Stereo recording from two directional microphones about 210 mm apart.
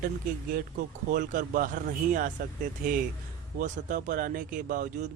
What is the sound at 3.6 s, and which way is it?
A man's voice, 40° right (ahead or behind).